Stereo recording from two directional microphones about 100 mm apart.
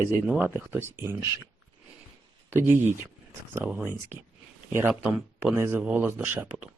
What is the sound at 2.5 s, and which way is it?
Speech, 25° right (ahead or behind).